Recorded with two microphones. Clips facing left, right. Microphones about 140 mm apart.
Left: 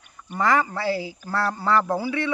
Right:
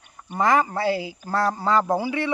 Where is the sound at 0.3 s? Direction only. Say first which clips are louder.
Right 1 dB; 20° right (ahead or behind).